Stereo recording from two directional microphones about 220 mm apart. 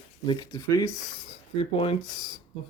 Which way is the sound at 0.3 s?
15° left (ahead or behind).